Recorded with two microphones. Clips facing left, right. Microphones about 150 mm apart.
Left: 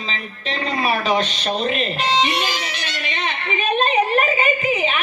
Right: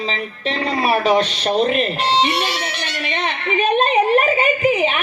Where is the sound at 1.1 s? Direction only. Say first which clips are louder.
Right 5 dB; 55° right (ahead or behind).